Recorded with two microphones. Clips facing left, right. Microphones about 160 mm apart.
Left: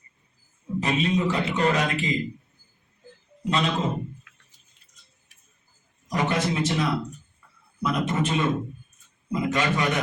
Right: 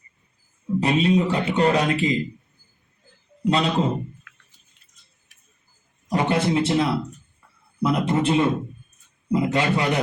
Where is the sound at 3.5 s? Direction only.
35° right (ahead or behind).